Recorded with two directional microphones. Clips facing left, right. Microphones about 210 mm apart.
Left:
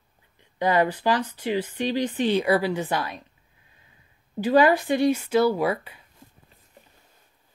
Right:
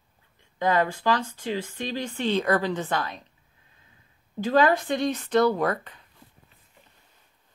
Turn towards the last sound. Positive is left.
turn(degrees=10)  # may be behind; listen again after turning